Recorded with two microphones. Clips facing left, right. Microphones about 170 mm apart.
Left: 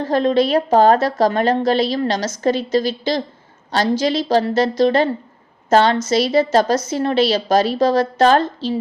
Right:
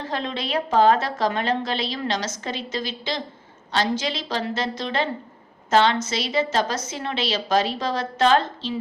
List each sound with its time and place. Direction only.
0.0 s a woman's voice: 40° left (ahead or behind)